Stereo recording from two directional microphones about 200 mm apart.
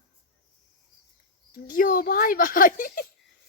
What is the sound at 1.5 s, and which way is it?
Speech, 45° left (ahead or behind).